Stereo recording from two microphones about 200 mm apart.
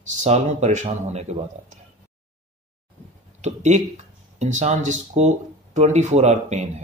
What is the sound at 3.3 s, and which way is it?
Speech, 35° right (ahead or behind).